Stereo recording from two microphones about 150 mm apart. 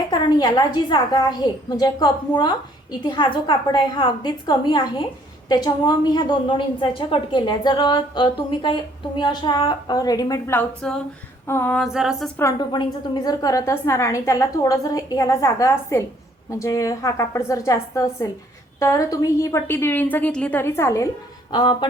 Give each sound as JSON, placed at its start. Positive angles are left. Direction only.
{"t": 0.1, "sound": "a woman's voice", "side_deg": 30}
{"t": 11.8, "sound": "a sound", "side_deg": -5}
{"t": 12.5, "sound": "a woman's voice", "side_deg": 30}
{"t": 21.5, "sound": "speech", "side_deg": 30}